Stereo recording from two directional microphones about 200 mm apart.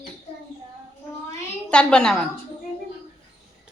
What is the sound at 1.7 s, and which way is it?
Speech, 5° left (ahead or behind).